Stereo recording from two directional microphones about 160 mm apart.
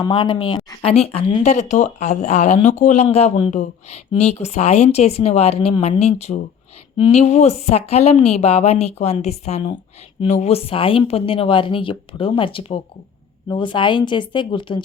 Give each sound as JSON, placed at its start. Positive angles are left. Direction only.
{"t": 0.0, "sound": "speech", "side_deg": 30}
{"t": 1.5, "sound": "speech", "side_deg": 50}